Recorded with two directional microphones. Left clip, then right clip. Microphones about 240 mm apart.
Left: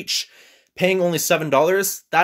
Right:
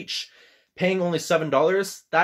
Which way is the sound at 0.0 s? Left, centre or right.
Left.